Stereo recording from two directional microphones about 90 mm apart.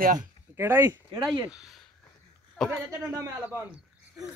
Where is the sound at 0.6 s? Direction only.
25° right (ahead or behind).